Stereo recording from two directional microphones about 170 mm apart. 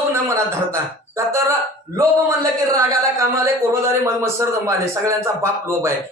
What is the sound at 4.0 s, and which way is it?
A man's voice, 15° right (ahead or behind).